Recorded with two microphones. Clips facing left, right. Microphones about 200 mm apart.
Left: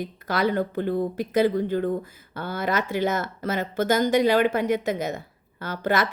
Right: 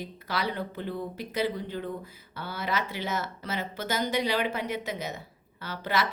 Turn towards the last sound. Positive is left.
turn(degrees=50)  # may be behind; listen again after turning